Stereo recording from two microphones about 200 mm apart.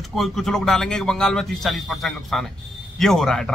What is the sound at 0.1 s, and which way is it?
A man's voice, centre (ahead or behind).